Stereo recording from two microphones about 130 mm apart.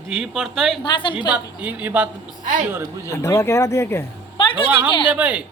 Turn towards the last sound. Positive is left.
turn(degrees=-10)  # may be behind; listen again after turning